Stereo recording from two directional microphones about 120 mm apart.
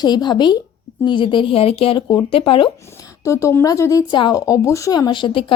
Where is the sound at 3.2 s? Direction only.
25° left (ahead or behind).